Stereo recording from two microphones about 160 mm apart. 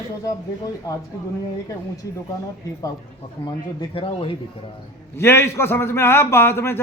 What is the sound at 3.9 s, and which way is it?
Speech, 35° left (ahead or behind).